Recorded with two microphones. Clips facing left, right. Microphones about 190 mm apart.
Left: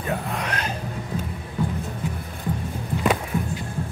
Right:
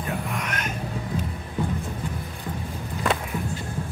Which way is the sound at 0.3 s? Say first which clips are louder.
Left 2 dB; 35° left (ahead or behind).